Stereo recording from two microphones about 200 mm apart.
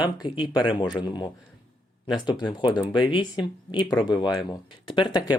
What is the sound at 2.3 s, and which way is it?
Speech, 20° left (ahead or behind).